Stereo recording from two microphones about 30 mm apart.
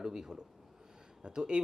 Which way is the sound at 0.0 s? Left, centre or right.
Right.